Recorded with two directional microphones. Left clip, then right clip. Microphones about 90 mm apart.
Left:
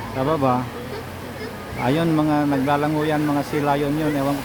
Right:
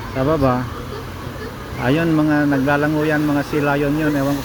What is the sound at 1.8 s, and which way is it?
Speech, centre (ahead or behind).